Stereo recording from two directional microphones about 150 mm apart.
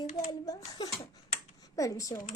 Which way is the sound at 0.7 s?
25° left (ahead or behind).